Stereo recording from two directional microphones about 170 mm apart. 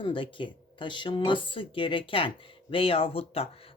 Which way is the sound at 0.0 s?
30° left (ahead or behind).